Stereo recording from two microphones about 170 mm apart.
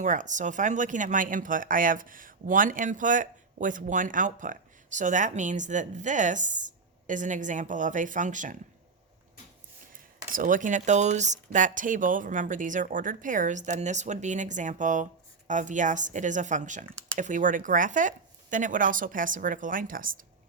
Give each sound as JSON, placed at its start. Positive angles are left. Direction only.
{"t": 0.0, "sound": "speech", "side_deg": -50}
{"t": 10.3, "sound": "speech", "side_deg": -55}